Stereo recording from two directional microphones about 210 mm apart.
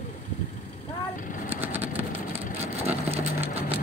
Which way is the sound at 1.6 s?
10° right (ahead or behind).